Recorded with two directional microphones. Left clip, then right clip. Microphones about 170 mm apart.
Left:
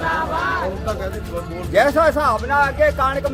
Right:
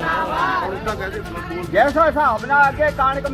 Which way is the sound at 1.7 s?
30° left (ahead or behind).